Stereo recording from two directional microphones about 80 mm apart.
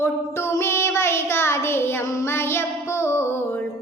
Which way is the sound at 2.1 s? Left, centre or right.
Left.